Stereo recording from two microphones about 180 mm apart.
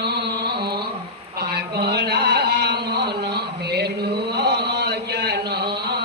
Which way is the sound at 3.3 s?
65° right (ahead or behind).